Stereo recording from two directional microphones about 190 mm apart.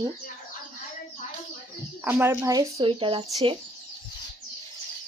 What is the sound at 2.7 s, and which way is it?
Speech, 30° right (ahead or behind).